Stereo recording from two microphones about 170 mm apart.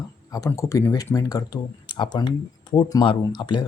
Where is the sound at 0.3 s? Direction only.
20° left (ahead or behind).